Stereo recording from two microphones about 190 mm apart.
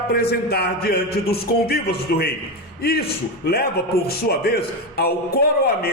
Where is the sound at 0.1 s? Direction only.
55° left (ahead or behind).